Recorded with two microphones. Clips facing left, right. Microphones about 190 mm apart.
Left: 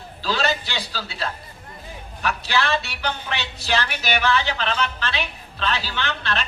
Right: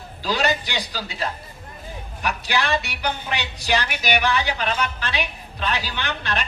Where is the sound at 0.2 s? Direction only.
15° right (ahead or behind).